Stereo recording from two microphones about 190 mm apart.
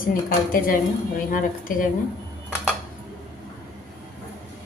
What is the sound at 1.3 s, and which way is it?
Speech, 45° left (ahead or behind).